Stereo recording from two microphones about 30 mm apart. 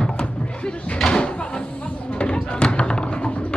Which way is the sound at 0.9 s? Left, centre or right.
Centre.